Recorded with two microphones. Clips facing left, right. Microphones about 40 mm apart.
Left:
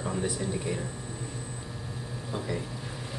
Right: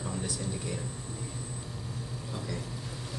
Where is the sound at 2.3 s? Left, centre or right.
Left.